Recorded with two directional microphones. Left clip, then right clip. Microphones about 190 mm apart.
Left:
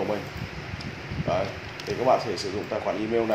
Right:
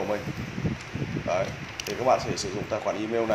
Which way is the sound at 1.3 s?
35° right (ahead or behind).